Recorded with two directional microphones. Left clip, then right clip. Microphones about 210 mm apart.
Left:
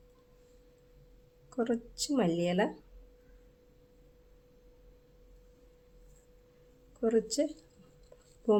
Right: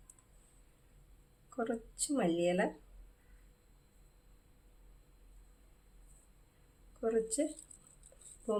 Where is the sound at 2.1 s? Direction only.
30° left (ahead or behind).